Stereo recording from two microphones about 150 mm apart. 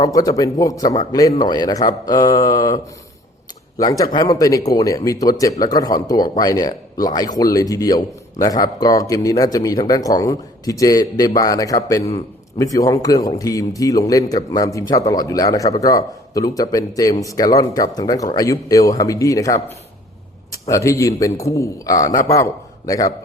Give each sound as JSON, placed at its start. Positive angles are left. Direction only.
{"t": 0.0, "sound": "speech", "side_deg": 25}